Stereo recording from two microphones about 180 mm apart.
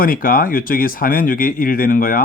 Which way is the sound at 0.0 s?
50° left (ahead or behind).